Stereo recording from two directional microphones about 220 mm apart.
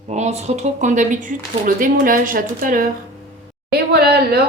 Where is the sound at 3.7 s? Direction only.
45° right (ahead or behind).